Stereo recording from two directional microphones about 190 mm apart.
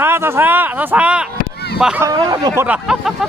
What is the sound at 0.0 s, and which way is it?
Speech, 10° right (ahead or behind).